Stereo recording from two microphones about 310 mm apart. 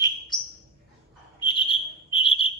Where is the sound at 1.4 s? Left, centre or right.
Centre.